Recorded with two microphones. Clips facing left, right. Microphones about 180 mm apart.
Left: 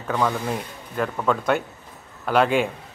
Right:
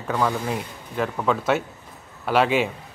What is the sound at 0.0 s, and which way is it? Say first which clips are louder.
A man's voice: even; 5° right (ahead or behind).